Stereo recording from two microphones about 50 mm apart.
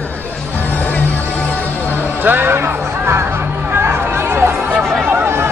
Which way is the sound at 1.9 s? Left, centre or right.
Right.